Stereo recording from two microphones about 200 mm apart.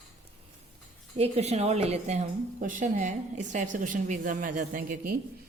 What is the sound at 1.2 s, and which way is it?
A woman's voice, 30° right (ahead or behind).